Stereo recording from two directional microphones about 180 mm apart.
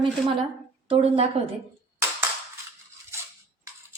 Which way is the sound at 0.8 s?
30° right (ahead or behind).